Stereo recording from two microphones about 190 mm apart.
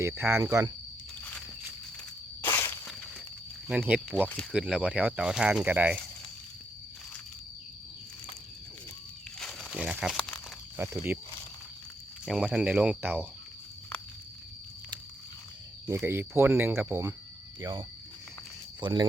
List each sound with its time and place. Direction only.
0.0 s speech: 10° right (ahead or behind)
2.4 s insect: 10° left (ahead or behind)
3.7 s speech: 5° right (ahead or behind)
9.4 s crumpling: centre (ahead or behind)
10.8 s speech: 10° right (ahead or behind)
12.2 s speech: 5° right (ahead or behind)
15.9 s speech: 10° right (ahead or behind)